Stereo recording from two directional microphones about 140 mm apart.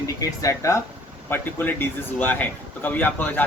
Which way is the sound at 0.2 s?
20° left (ahead or behind).